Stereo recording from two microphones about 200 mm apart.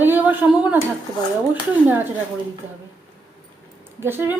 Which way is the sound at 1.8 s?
10° right (ahead or behind).